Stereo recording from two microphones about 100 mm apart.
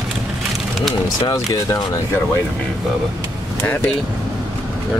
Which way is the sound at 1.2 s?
30° left (ahead or behind).